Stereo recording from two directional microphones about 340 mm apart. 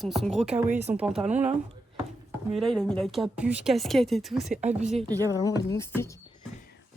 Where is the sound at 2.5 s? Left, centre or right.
Centre.